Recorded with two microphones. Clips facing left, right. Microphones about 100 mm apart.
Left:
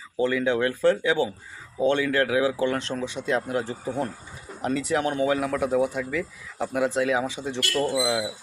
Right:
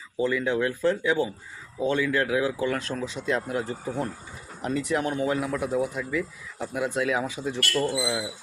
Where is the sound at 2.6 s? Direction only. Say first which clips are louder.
Left 2 dB; 25° left (ahead or behind).